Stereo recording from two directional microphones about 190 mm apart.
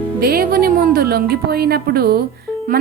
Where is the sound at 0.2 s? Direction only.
55° right (ahead or behind).